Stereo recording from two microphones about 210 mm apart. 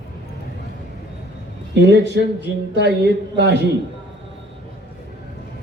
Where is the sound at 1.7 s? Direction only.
55° right (ahead or behind).